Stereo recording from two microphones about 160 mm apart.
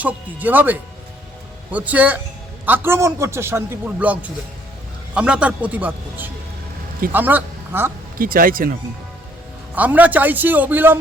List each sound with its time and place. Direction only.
0.0 s a man's voice: 10° right (ahead or behind)
8.2 s speech: 65° right (ahead or behind)
9.7 s a man's voice: 10° right (ahead or behind)